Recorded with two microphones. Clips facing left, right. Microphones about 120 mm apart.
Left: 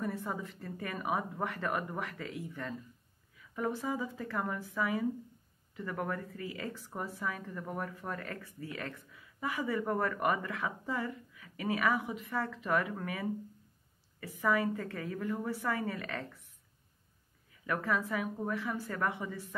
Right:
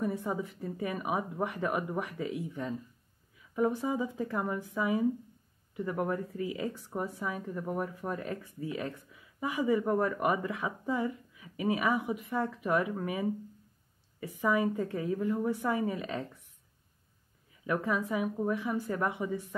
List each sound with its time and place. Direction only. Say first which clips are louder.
0.0 s a woman's voice: right 4 dB; 15° right (ahead or behind)
17.6 s a woman's voice: right 2 dB; 15° right (ahead or behind)